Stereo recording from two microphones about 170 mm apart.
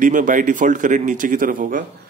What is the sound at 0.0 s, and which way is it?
Speech, 50° right (ahead or behind).